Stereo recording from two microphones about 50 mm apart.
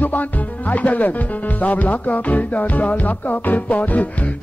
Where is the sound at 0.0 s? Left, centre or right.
Left.